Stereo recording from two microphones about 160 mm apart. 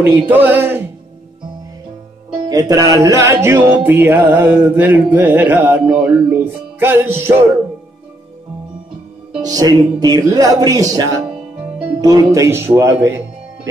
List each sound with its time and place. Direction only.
0.0 s music: 10° right (ahead or behind)
2.4 s music: 20° right (ahead or behind)
9.4 s music: 25° right (ahead or behind)